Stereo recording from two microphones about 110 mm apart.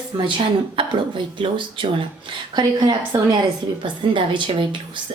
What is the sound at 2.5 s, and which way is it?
A woman's voice, 40° right (ahead or behind).